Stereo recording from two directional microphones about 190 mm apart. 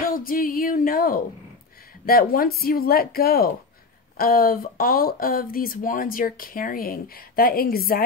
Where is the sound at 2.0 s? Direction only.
50° left (ahead or behind).